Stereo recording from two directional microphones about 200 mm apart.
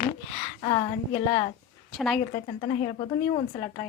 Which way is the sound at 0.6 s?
20° left (ahead or behind).